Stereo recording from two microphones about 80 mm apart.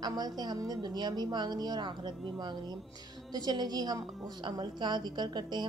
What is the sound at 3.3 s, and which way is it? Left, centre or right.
Speech, right.